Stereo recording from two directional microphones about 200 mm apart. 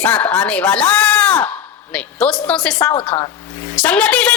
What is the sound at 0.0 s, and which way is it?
Speech, 5° left (ahead or behind).